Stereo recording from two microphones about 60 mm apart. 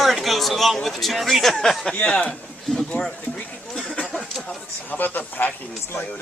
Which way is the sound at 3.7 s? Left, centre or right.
Centre.